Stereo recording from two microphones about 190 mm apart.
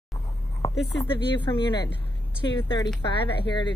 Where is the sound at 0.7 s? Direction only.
65° left (ahead or behind).